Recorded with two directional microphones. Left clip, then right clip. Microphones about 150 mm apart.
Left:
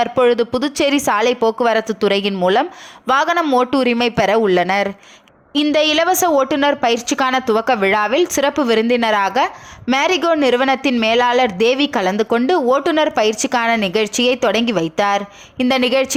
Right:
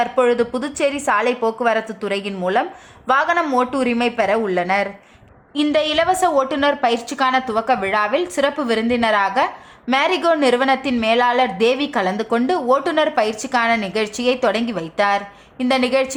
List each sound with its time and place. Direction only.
0.0 s a woman's voice: 35° left (ahead or behind)